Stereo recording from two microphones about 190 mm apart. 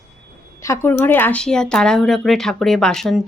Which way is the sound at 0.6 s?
15° left (ahead or behind).